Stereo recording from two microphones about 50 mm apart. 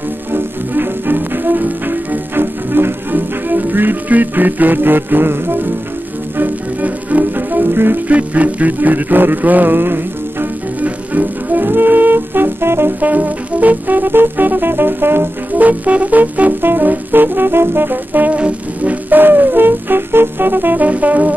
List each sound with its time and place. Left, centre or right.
0.3 s music: right
6.3 s music: right
8.1 s music: right
10.8 s music: right
13.0 s music: right
15.6 s music: right
18.3 s music: right